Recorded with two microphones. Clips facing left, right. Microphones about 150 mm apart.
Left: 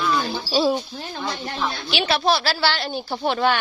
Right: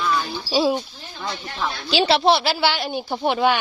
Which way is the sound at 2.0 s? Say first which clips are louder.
Right 3 dB; 30° right (ahead or behind).